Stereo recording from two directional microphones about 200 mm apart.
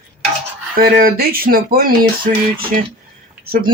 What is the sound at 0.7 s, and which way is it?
Speech, 45° right (ahead or behind).